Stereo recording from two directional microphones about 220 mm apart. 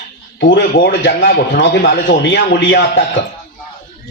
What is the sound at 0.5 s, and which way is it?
A man's voice, 50° left (ahead or behind).